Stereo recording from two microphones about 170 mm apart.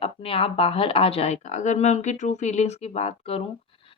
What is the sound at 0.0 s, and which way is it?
Speech, 35° left (ahead or behind).